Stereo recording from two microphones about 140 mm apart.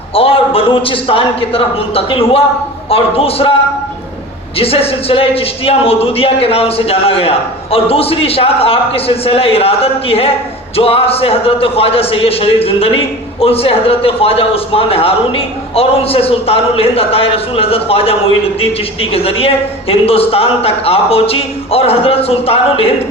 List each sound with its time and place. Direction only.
0.1 s a man's voice: 40° left (ahead or behind)
4.5 s a man's voice: 45° left (ahead or behind)